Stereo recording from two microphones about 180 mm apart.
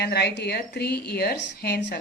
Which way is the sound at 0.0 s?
65° left (ahead or behind).